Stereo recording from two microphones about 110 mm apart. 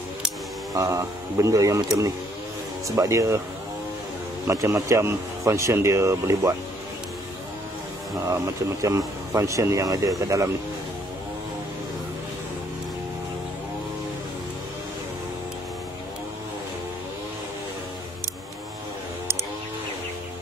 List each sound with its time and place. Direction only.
0.7 s speech: 30° right (ahead or behind)
4.5 s speech: 30° right (ahead or behind)
8.8 s speech: 30° right (ahead or behind)